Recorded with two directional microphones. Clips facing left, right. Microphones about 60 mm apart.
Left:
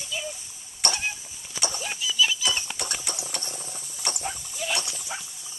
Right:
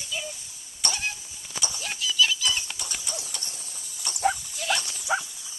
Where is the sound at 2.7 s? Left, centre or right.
Left.